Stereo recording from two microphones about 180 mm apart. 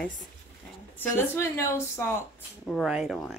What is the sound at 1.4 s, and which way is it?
Speech, 15° left (ahead or behind).